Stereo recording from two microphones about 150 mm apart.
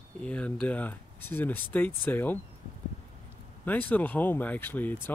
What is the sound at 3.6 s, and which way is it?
Speech, 10° left (ahead or behind).